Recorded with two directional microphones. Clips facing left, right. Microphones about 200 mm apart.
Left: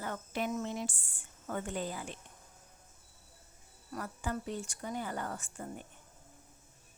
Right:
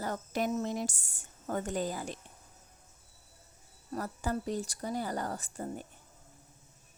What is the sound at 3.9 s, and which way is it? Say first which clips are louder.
Speech: right 4 dB; 35° right (ahead or behind).